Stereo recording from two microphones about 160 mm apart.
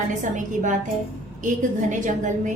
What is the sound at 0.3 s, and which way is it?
A woman's voice, 50° right (ahead or behind).